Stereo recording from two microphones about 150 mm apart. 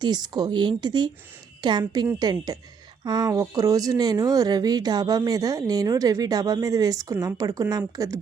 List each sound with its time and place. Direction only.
0.0 s speech: 30° right (ahead or behind)